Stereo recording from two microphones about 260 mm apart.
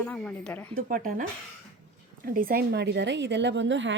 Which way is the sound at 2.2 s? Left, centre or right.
Right.